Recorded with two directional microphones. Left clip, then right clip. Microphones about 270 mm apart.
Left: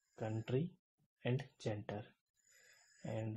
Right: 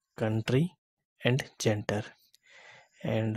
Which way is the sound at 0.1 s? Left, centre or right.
Right.